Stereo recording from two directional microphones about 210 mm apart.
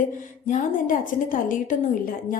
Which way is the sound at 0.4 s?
40° left (ahead or behind).